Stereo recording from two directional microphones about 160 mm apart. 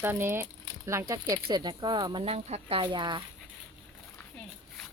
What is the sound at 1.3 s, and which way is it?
Speech, 30° right (ahead or behind).